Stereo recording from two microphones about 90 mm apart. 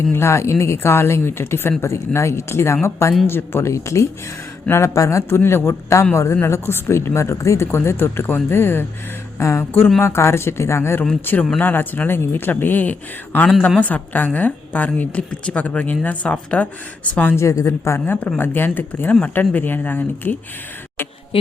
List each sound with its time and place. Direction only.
0.1 s a man's voice: 30° left (ahead or behind)
17.3 s a man's voice: 35° left (ahead or behind); by 20.3 s 20° left (ahead or behind)